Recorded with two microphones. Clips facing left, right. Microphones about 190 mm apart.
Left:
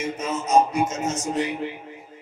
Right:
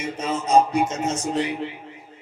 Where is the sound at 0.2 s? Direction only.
30° right (ahead or behind).